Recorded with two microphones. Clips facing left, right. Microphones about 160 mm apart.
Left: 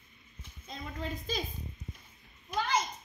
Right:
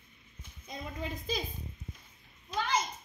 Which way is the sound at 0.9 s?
Centre (ahead or behind).